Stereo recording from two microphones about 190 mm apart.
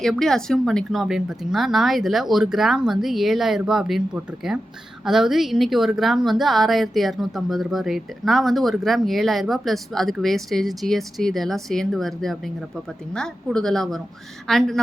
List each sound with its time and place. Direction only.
0.0 s speech: centre (ahead or behind)